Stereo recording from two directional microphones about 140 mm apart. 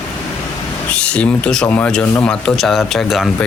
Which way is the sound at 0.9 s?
10° left (ahead or behind).